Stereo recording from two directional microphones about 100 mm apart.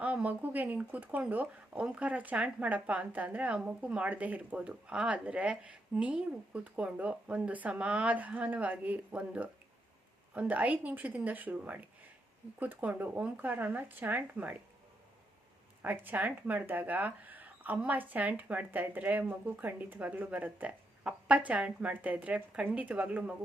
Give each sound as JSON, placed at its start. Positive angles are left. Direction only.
{"t": 0.0, "sound": "speech", "side_deg": -15}
{"t": 15.8, "sound": "speech", "side_deg": -20}